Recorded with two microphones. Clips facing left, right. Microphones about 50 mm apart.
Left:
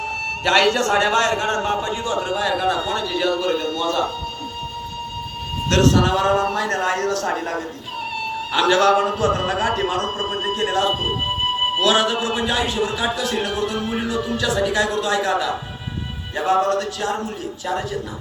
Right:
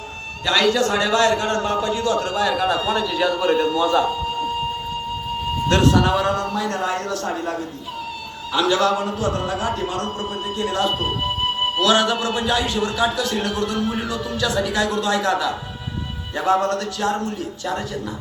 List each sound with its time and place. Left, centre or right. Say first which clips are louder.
0.4 s a man's voice: left 1 dB; left
2.0 s a man's voice: even; centre
5.6 s a man's voice: even; centre
6.6 s a man's voice: left 2 dB; left
8.5 s a man's voice: left 3 dB; left
10.7 s a man's voice: right 1 dB; centre